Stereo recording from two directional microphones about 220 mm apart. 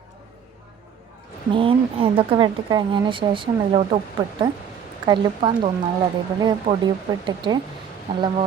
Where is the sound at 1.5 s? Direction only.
25° right (ahead or behind).